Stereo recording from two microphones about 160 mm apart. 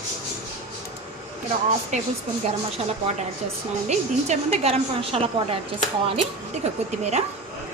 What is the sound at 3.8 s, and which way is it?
Speech, 40° right (ahead or behind).